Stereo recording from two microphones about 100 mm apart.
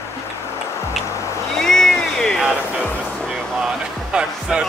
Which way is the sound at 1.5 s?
5° left (ahead or behind).